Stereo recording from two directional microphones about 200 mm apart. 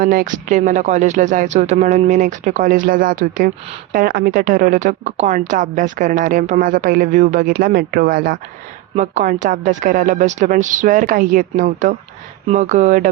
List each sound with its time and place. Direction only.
0.0 s speech: 45° right (ahead or behind)